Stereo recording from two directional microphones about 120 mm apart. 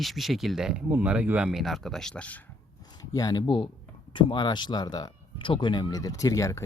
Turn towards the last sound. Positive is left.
turn(degrees=25)  # may be behind; listen again after turning